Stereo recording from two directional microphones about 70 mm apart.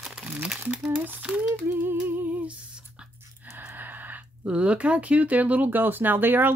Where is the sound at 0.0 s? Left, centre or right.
Centre.